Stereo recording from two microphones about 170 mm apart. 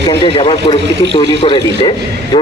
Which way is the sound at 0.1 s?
30° left (ahead or behind).